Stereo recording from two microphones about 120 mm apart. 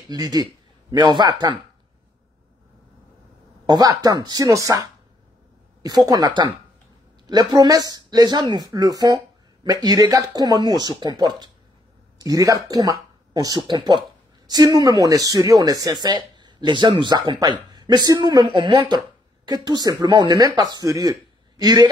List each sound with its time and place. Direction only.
0.1 s speech: 35° right (ahead or behind)
3.6 s speech: 35° right (ahead or behind)